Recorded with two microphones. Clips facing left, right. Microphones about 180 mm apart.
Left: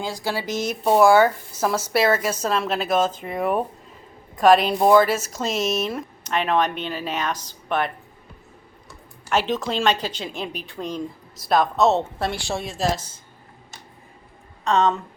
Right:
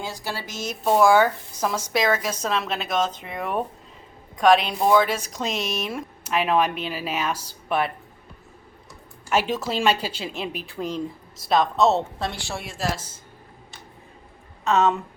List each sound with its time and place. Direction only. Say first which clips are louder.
0.0 s a woman's voice: left 5 dB; 10° left (ahead or behind); by 7.9 s 5° right (ahead or behind)
9.3 s speech: left 1 dB; 10° right (ahead or behind)
12.3 s a woman's voice: left 5 dB; 15° left (ahead or behind)
14.6 s a woman's voice: even; 5° right (ahead or behind)